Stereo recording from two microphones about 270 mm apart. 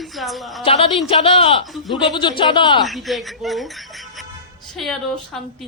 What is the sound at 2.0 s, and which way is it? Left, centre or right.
Speech, centre.